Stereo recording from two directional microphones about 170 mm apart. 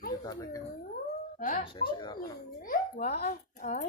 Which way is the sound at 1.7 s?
30° left (ahead or behind).